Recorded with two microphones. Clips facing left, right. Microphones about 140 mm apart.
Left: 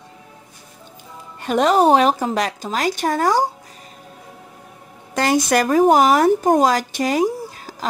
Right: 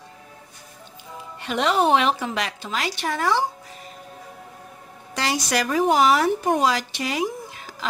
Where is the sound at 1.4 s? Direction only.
45° left (ahead or behind).